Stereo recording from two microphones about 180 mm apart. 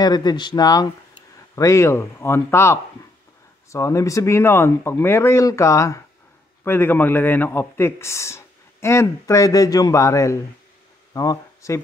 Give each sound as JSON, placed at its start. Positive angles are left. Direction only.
{"t": 0.0, "sound": "speech", "side_deg": 25}